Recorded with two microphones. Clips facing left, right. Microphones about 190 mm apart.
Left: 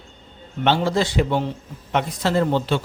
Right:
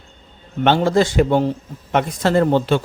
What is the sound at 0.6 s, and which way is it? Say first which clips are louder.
A man's voice: right 4 dB; 50° right (ahead or behind).